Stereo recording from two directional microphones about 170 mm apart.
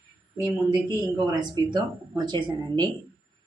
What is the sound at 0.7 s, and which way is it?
Speech, 25° right (ahead or behind).